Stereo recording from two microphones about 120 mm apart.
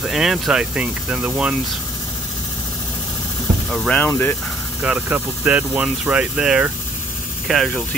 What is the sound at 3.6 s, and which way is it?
Speech, 5° left (ahead or behind).